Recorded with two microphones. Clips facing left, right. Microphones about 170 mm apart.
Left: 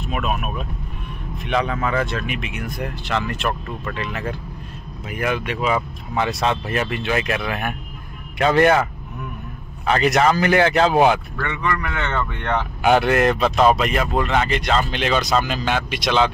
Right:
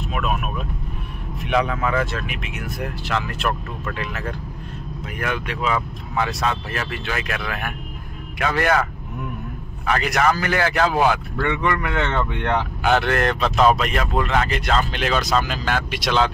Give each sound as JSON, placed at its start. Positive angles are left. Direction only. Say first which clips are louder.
{"t": 0.1, "sound": "vehicle", "louder": "left 1 dB", "side_deg": 0}
{"t": 1.4, "sound": "speech", "louder": "right 1 dB", "side_deg": -5}
{"t": 6.1, "sound": "speech", "louder": "left 2 dB", "side_deg": 25}
{"t": 9.8, "sound": "speech", "louder": "left 3 dB", "side_deg": 20}
{"t": 11.4, "sound": "speech", "louder": "right 3 dB", "side_deg": -25}
{"t": 12.8, "sound": "speech", "louder": "left 4 dB", "side_deg": 15}